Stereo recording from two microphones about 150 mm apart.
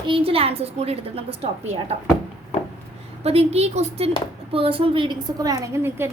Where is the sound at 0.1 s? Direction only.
40° right (ahead or behind).